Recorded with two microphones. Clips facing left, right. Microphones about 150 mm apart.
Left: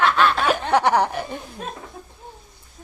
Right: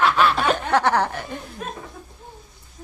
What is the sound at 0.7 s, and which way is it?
Chuckle, 15° left (ahead or behind).